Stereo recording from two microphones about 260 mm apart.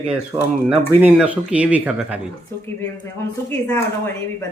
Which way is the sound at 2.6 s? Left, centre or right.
Centre.